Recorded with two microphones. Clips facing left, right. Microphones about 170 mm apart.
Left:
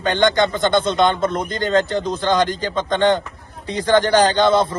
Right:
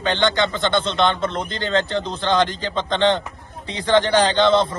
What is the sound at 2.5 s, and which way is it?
Speech, 45° left (ahead or behind).